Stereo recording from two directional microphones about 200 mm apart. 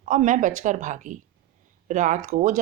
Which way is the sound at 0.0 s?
40° right (ahead or behind).